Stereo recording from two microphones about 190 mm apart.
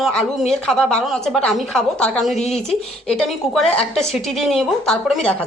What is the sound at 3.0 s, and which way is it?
A woman's voice, 5° left (ahead or behind).